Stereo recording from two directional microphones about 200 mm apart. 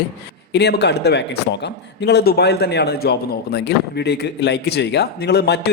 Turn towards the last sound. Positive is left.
turn(degrees=55)  # may be behind; listen again after turning